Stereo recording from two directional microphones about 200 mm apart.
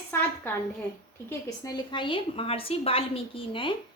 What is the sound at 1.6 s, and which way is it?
A woman's voice, 20° left (ahead or behind).